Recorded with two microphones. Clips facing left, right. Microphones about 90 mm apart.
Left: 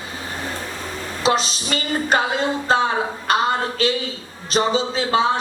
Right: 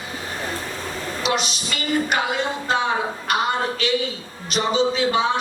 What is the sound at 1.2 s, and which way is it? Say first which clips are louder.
Speech: left 5 dB; 35° left (ahead or behind).